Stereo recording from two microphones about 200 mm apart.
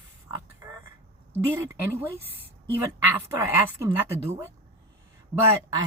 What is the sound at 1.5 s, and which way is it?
Speech, 10° right (ahead or behind).